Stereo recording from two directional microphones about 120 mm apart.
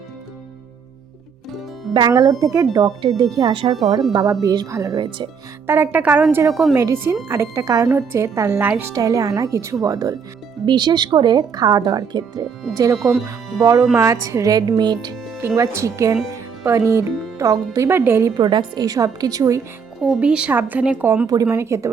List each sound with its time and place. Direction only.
1.9 s a woman's voice: 35° right (ahead or behind)
4.9 s speech: 40° right (ahead or behind)
5.6 s a woman's voice: 20° right (ahead or behind); by 6.7 s 5° right (ahead or behind)
6.7 s a woman's voice: 20° right (ahead or behind)
8.9 s a woman's voice: 25° right (ahead or behind)
13.0 s speech: centre (ahead or behind)
13.6 s a woman's voice: 30° right (ahead or behind)
15.4 s a woman's voice: 20° right (ahead or behind)
18.3 s speech: 40° right (ahead or behind)
20.0 s a woman's voice: 5° right (ahead or behind); by 21.8 s 25° right (ahead or behind)